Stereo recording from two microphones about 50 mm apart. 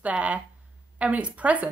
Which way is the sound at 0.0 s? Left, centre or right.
Right.